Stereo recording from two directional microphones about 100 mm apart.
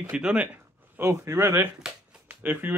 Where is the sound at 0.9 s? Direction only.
25° right (ahead or behind).